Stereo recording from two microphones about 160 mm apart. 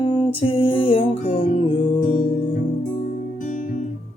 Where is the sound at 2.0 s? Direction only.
55° left (ahead or behind).